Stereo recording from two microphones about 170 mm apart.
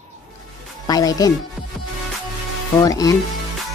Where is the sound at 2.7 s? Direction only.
20° left (ahead or behind).